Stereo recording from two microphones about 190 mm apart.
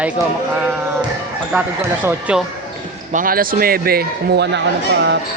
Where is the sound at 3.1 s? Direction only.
50° right (ahead or behind).